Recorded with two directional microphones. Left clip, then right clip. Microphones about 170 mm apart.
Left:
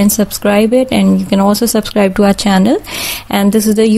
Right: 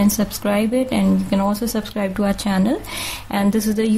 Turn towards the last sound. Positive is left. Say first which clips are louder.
# left 9 dB
turn(degrees=40)  # may be behind; listen again after turning